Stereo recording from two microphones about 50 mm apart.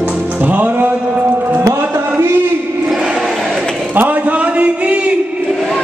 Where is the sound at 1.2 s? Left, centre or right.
Right.